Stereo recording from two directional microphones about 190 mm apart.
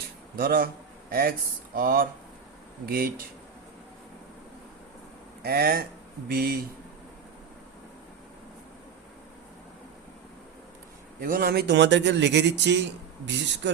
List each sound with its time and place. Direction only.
0.3 s speech: 50° right (ahead or behind)
5.4 s speech: 55° right (ahead or behind)
11.2 s a man's voice: 50° right (ahead or behind); by 12.8 s 65° right (ahead or behind)